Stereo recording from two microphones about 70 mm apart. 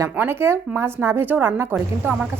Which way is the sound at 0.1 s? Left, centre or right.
Right.